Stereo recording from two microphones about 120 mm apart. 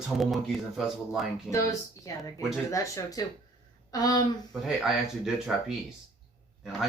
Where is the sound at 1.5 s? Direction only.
25° left (ahead or behind).